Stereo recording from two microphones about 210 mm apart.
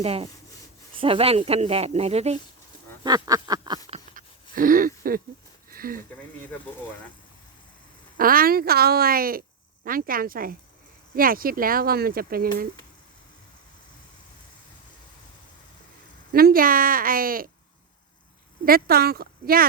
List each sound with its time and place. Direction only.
0.0 s speech: 30° right (ahead or behind)
3.0 s a sound: 20° right (ahead or behind); by 5.2 s 45° right (ahead or behind)
5.7 s speech: 45° right (ahead or behind)
8.2 s speech: 45° right (ahead or behind)
16.3 s speech: 45° right (ahead or behind)
18.6 s speech: 45° right (ahead or behind)